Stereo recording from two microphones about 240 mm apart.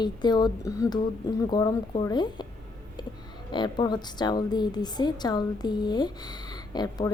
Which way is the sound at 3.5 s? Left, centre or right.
Centre.